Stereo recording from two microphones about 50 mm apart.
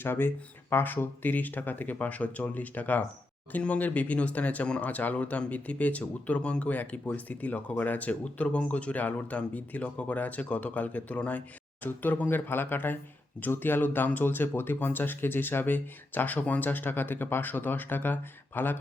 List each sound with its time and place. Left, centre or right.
0.0 s speech: left